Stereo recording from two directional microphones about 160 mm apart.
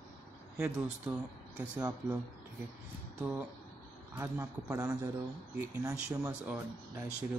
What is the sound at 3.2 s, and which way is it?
Speech, 10° right (ahead or behind).